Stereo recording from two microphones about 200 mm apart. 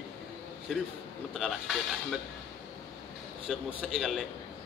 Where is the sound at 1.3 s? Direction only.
Centre (ahead or behind).